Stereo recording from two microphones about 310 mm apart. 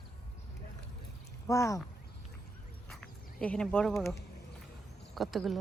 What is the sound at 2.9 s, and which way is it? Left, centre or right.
Insect, centre.